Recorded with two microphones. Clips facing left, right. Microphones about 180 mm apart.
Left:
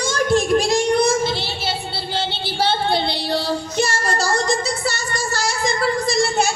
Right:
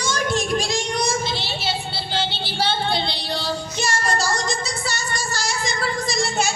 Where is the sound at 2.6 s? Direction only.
55° left (ahead or behind).